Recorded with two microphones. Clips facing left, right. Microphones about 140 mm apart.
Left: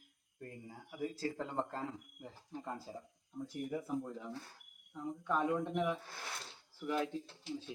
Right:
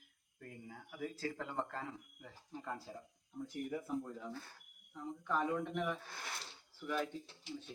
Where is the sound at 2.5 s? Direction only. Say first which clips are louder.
Left 1 dB; 20° left (ahead or behind).